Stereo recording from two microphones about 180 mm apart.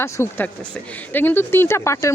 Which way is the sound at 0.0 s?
10° left (ahead or behind).